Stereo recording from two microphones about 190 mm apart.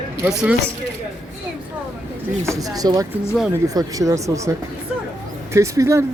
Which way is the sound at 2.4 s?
15° right (ahead or behind).